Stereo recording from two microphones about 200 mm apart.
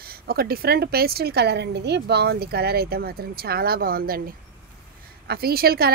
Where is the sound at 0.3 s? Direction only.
50° right (ahead or behind).